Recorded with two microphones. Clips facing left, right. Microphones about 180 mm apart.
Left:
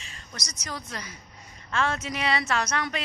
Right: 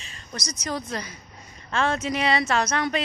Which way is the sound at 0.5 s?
25° right (ahead or behind).